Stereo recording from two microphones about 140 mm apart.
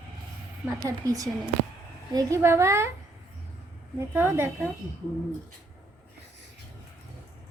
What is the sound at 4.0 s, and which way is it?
Speech, 15° right (ahead or behind).